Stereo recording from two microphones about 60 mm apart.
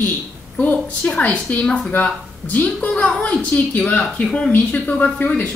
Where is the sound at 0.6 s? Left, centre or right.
Left.